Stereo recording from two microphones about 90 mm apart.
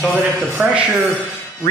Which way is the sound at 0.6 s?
15° right (ahead or behind).